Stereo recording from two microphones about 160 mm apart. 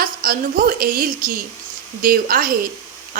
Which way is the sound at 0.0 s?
65° right (ahead or behind).